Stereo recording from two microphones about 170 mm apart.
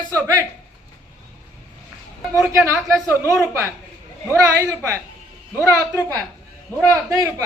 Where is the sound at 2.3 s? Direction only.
15° right (ahead or behind).